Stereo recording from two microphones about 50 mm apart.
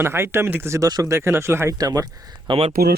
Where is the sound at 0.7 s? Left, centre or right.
Right.